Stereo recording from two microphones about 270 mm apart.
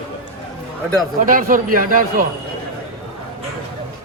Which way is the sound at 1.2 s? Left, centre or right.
Right.